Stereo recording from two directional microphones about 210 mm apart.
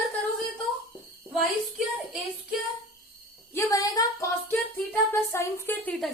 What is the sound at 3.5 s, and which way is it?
A woman's voice, 15° left (ahead or behind).